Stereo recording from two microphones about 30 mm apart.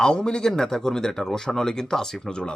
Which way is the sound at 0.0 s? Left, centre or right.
Left.